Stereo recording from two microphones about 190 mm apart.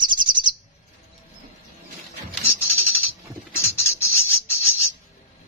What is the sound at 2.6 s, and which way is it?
Bird, 10° left (ahead or behind).